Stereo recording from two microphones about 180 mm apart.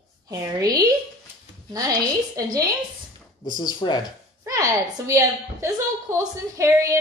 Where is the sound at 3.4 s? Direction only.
25° left (ahead or behind).